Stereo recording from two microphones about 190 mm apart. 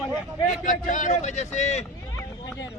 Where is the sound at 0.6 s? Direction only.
45° left (ahead or behind).